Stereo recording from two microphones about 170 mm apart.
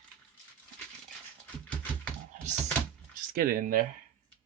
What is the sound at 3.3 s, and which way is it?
Speech, 60° right (ahead or behind).